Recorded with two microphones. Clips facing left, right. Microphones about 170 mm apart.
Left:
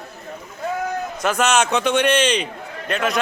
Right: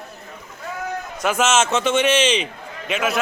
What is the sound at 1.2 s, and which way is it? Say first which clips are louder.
A man's voice: even; 5° right (ahead or behind).